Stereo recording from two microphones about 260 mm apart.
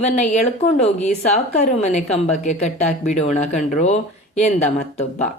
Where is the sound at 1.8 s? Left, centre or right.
Left.